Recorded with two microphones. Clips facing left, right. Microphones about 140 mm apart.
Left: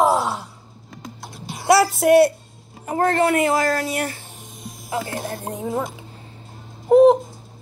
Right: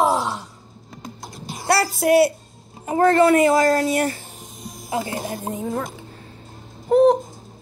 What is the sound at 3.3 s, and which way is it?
Speech, 40° right (ahead or behind).